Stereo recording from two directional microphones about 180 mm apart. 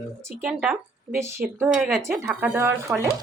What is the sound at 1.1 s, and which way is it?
Speech, 15° right (ahead or behind).